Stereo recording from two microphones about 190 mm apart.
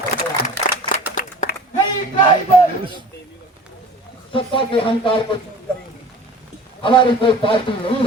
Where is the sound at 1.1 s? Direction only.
45° left (ahead or behind).